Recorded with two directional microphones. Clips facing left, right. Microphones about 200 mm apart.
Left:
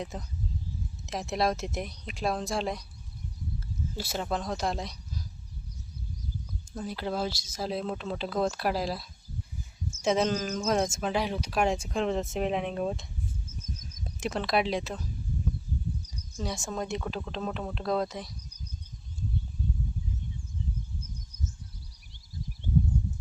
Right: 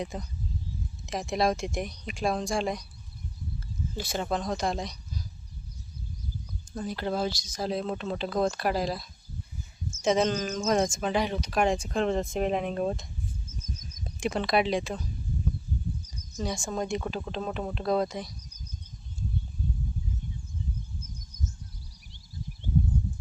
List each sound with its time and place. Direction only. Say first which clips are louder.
0.0 s speech: right 2 dB; centre (ahead or behind)
3.9 s speech: right 2 dB; 5° left (ahead or behind)
6.7 s speech: right 2 dB; 5° left (ahead or behind)
14.3 s speech: right 2 dB; centre (ahead or behind)
16.4 s speech: right 2 dB; centre (ahead or behind)